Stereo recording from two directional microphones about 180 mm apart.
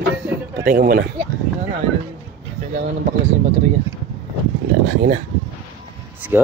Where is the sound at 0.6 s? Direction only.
55° right (ahead or behind).